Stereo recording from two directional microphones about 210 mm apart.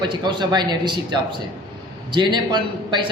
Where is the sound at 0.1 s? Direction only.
20° right (ahead or behind).